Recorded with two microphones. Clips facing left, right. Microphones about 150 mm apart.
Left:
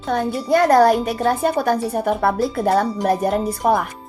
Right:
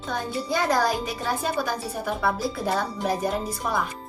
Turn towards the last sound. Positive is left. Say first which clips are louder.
# left 9 dB
turn(degrees=60)  # may be behind; listen again after turning